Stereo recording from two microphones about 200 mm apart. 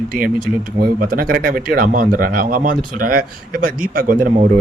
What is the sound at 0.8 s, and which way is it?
Speech, 45° right (ahead or behind).